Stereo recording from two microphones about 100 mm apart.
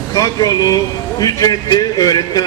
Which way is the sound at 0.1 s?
35° left (ahead or behind).